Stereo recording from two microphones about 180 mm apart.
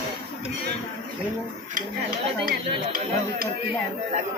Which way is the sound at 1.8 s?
50° right (ahead or behind).